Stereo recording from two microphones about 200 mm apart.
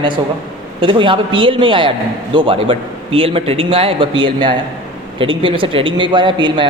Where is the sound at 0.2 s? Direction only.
20° right (ahead or behind).